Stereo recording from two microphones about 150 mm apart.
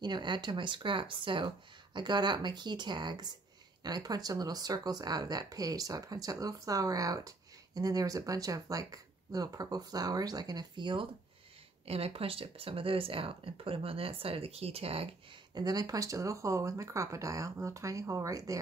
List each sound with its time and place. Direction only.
0.0 s speech: 30° right (ahead or behind)
15.5 s speech: 25° right (ahead or behind)